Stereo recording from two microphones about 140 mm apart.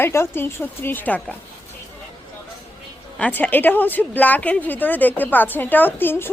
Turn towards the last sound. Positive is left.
turn(degrees=15)  # may be behind; listen again after turning